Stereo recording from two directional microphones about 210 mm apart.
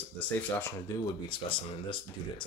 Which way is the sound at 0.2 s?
10° left (ahead or behind).